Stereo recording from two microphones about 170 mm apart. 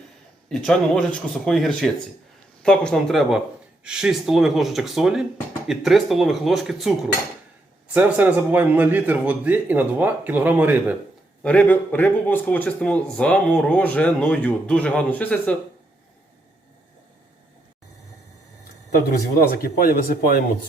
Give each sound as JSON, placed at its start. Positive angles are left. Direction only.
{"t": 0.4, "sound": "speech", "side_deg": 5}
{"t": 7.9, "sound": "a man's voice", "side_deg": -10}
{"t": 11.4, "sound": "speech", "side_deg": 10}
{"t": 19.6, "sound": "speech", "side_deg": 60}